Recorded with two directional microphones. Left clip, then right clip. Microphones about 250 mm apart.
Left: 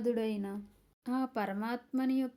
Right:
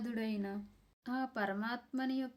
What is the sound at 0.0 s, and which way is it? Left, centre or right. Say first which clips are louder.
Speech: left 7 dB; centre.